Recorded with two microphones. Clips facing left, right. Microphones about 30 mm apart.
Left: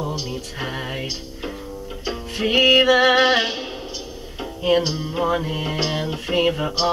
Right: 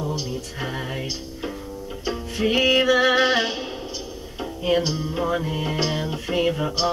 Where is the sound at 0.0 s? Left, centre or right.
Left.